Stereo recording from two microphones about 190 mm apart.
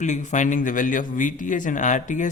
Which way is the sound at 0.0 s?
40° left (ahead or behind).